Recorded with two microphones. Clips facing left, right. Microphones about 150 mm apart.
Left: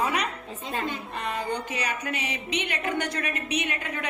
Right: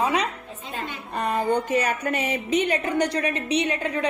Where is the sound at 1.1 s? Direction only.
45° right (ahead or behind).